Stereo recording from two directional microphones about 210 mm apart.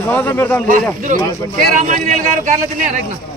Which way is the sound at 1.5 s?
35° right (ahead or behind).